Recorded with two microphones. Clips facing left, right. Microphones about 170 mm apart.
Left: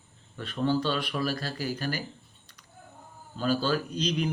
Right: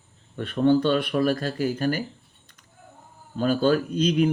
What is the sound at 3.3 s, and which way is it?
Speech, 50° right (ahead or behind).